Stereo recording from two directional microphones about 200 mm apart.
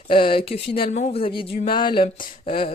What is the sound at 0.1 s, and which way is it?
Speech, 25° left (ahead or behind).